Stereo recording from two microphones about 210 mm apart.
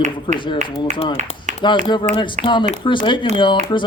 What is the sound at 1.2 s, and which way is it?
Speech, 35° right (ahead or behind).